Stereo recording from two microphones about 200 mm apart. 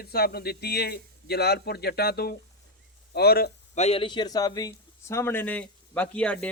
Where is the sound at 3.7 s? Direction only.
30° left (ahead or behind).